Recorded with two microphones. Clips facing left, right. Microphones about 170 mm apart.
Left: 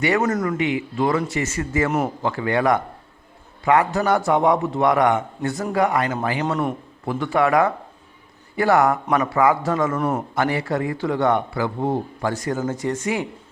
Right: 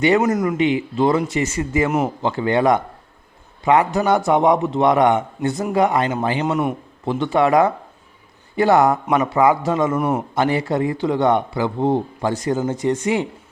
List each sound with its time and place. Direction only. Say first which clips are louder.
0.0 s a man's voice: right 4 dB; 20° right (ahead or behind)